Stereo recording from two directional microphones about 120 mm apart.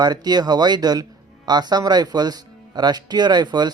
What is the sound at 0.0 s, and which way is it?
Speech, 35° right (ahead or behind).